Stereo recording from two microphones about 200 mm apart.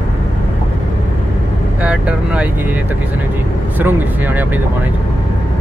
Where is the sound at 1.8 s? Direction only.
5° right (ahead or behind).